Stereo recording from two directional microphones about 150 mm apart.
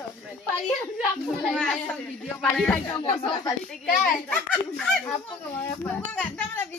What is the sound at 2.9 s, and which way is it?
Speech, 35° left (ahead or behind).